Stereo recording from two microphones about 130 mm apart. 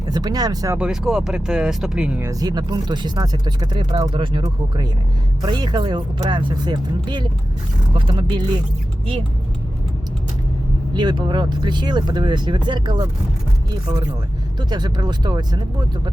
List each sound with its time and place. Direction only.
0.1 s speech: 30° right (ahead or behind)
0.8 s speech: 5° right (ahead or behind)
2.3 s speech: 30° right (ahead or behind)
10.9 s speech: 35° right (ahead or behind)
14.6 s speech: 35° right (ahead or behind)